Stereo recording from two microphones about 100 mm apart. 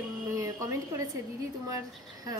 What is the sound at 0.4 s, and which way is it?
Speech, 35° right (ahead or behind).